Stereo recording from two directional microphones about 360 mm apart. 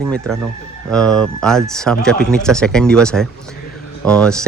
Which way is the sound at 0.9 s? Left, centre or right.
Centre.